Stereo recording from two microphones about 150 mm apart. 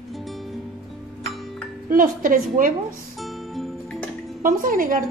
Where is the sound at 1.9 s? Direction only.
65° right (ahead or behind).